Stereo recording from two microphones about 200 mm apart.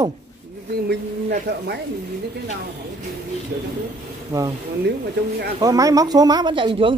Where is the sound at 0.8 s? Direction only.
50° right (ahead or behind).